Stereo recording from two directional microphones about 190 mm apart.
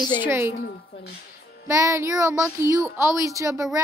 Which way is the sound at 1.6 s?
15° right (ahead or behind).